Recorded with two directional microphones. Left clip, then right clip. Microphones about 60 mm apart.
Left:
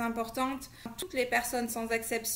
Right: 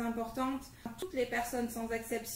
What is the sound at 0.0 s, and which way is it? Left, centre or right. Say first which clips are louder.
A woman's voice: left 4 dB; left.